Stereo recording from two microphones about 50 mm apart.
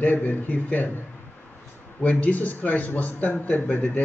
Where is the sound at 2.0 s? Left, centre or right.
Left.